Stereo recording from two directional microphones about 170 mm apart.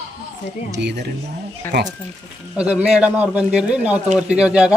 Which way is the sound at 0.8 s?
90° right.